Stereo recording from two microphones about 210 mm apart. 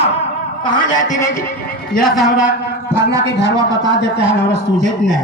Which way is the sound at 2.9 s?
15° right (ahead or behind).